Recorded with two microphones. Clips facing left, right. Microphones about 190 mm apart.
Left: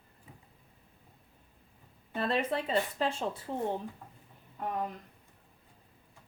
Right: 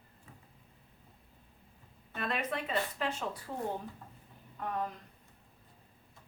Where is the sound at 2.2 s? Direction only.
30° left (ahead or behind).